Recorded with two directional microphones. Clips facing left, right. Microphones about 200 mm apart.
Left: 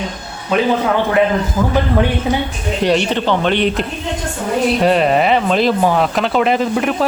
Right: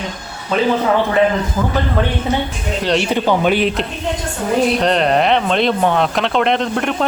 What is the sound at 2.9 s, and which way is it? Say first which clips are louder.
Speech: right 2 dB; 5° right (ahead or behind).